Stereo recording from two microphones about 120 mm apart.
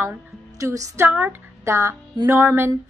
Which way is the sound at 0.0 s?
20° right (ahead or behind).